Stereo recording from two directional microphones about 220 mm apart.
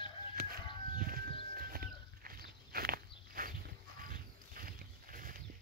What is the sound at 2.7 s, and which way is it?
Walk, 40° right (ahead or behind).